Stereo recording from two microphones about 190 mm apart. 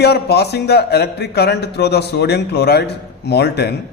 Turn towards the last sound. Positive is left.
turn(degrees=60)  # may be behind; listen again after turning